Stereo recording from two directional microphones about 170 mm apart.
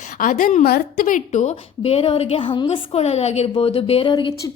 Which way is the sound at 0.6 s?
60° left (ahead or behind).